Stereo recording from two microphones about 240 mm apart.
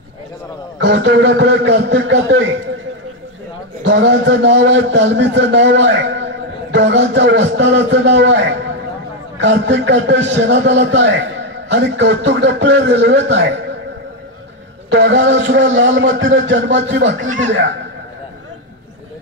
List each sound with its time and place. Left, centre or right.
0.7 s a man's voice: right
3.8 s a man's voice: right
14.9 s a man's voice: right
17.2 s speech: right